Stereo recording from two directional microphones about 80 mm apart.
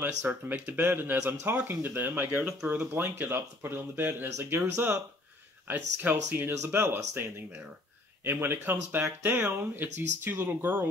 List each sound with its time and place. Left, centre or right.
0.0 s speech: right